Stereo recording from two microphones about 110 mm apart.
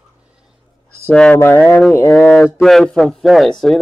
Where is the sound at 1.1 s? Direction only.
10° left (ahead or behind).